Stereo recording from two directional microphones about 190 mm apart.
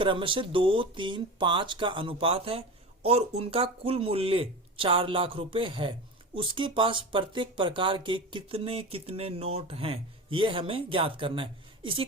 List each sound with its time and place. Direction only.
0.0 s speech: 25° right (ahead or behind)